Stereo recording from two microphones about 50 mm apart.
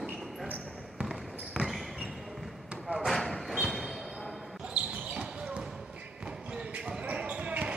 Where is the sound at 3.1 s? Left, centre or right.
Centre.